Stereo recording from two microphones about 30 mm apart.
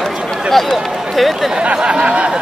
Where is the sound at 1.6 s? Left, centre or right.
Right.